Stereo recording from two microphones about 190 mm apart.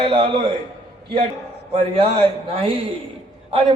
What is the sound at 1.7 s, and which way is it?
A man's voice, 30° right (ahead or behind).